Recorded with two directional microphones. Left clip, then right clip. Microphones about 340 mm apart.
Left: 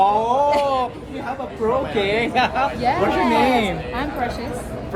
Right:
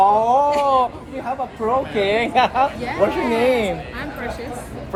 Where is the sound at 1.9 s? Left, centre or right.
Centre.